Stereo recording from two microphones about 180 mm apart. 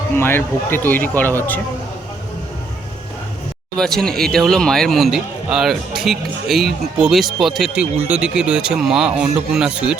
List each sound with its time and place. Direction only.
0.2 s speech: 10° left (ahead or behind)
3.8 s speech: 5° left (ahead or behind)